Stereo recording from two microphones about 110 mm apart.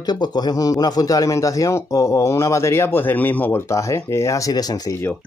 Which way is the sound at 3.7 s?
25° left (ahead or behind).